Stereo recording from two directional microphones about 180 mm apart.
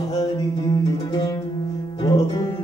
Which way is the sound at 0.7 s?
25° left (ahead or behind).